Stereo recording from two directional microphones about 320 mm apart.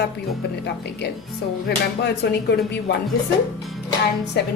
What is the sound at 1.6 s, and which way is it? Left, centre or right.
Speech, left.